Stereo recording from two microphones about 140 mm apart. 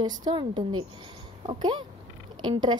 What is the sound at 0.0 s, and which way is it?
A woman's voice, 30° right (ahead or behind).